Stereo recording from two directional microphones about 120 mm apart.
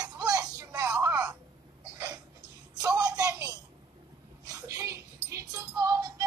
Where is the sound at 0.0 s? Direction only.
30° right (ahead or behind).